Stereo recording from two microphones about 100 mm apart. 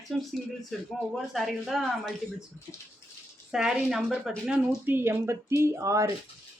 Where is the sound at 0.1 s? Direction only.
Centre (ahead or behind).